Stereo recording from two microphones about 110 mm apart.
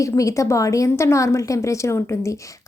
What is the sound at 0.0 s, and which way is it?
A woman's voice, 30° left (ahead or behind).